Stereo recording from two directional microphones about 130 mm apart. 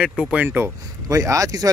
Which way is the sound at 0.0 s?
5° right (ahead or behind).